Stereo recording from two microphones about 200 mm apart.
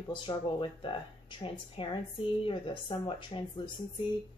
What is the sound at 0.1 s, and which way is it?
Speech, 25° left (ahead or behind).